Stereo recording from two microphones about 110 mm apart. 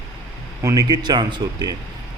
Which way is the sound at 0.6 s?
30° right (ahead or behind).